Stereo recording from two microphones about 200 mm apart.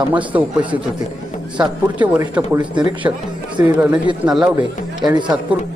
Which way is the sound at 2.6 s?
25° right (ahead or behind).